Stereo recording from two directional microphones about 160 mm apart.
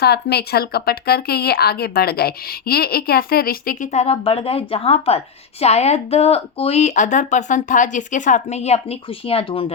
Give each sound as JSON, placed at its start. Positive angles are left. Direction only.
{"t": 0.0, "sound": "speech", "side_deg": 90}
{"t": 3.9, "sound": "a woman's voice", "side_deg": 40}